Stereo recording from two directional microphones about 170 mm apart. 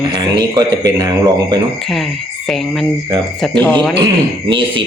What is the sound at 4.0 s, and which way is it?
Speech, 30° right (ahead or behind).